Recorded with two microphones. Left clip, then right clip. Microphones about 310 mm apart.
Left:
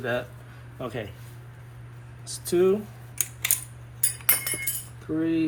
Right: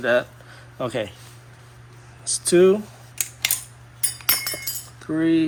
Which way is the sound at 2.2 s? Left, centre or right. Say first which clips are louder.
Right 6 dB; right.